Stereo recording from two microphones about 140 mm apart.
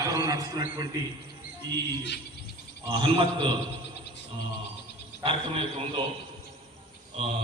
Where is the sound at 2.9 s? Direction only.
35° right (ahead or behind).